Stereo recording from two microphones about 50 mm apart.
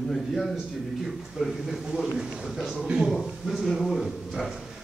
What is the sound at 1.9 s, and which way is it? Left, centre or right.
A man's voice, centre.